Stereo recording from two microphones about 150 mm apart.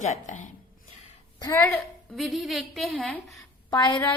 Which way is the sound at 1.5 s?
10° left (ahead or behind).